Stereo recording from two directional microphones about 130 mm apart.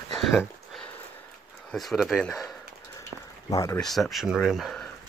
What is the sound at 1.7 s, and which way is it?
Speech, centre (ahead or behind).